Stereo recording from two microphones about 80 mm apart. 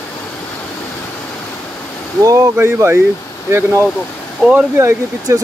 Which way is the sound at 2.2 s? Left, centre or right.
Right.